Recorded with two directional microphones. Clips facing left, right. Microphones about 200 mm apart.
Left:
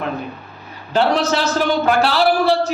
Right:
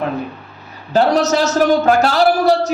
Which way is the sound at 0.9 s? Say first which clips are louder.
Right 3 dB; 40° right (ahead or behind).